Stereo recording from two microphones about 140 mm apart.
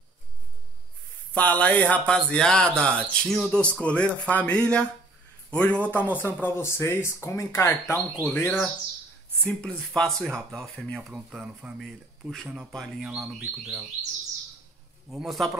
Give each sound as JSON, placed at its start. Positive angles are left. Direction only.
{"t": 1.3, "sound": "a man's voice", "side_deg": 10}
{"t": 15.0, "sound": "speech", "side_deg": 0}